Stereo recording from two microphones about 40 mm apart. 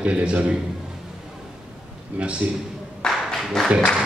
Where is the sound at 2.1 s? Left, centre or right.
Right.